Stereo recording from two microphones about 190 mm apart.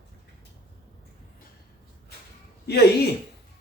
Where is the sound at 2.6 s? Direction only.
55° left (ahead or behind).